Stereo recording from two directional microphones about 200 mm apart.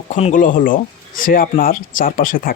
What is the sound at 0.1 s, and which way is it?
Speech, 35° left (ahead or behind).